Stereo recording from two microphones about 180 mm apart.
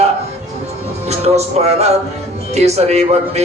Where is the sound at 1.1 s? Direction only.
35° right (ahead or behind).